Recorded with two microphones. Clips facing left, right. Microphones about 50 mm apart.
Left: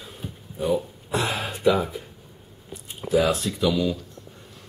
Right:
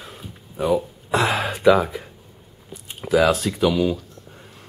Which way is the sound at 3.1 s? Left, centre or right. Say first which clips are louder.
Right 4 dB; right.